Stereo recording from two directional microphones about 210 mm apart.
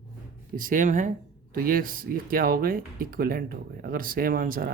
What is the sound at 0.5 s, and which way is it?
Speech, 40° right (ahead or behind).